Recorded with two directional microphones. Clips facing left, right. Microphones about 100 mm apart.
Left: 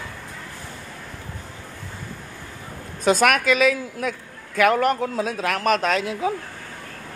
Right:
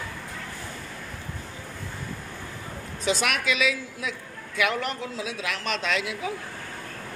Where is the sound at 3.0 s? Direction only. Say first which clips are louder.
Left 8 dB; 50° left (ahead or behind).